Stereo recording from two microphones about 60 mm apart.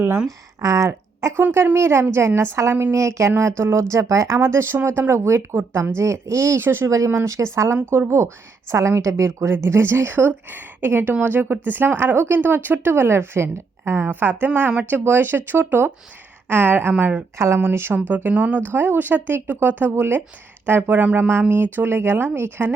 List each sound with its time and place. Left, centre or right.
0.3 s speech: right
1.4 s a woman's voice: right
4.4 s a woman's voice: right
6.8 s speech: right
7.8 s speech: right
8.7 s a woman's voice: right
17.3 s a woman's voice: right
17.6 s speech: right